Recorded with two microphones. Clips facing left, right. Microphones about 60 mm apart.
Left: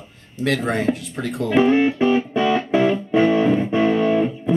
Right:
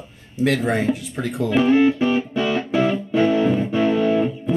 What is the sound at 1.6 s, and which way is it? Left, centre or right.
Speech, left.